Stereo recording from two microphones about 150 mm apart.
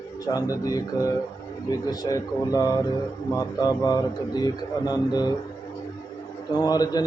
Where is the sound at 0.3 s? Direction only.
25° left (ahead or behind).